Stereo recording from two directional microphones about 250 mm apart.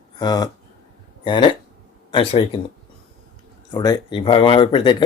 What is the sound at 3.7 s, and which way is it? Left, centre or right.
Speech, centre.